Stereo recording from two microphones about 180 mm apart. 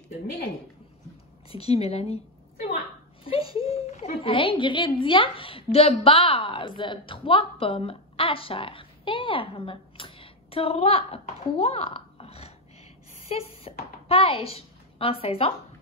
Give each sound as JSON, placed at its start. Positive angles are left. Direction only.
{"t": 1.5, "sound": "speech", "side_deg": 35}
{"t": 3.3, "sound": "a sound", "side_deg": 30}
{"t": 4.2, "sound": "a woman's voice", "side_deg": 30}